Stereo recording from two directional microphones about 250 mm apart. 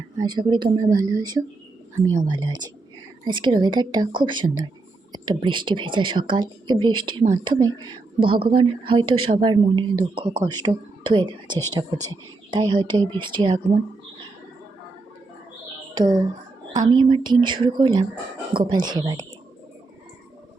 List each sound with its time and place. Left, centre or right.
0.2 s a woman's voice: centre
16.0 s a woman's voice: centre